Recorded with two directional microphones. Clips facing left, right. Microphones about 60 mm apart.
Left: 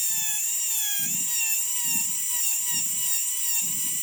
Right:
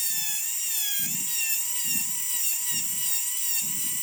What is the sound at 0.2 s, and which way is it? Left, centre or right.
Dental drill, centre.